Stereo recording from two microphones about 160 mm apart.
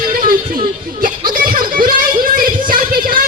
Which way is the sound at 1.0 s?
60° right (ahead or behind).